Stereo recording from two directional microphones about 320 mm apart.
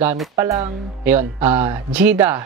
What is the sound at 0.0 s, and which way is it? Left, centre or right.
Speech, centre.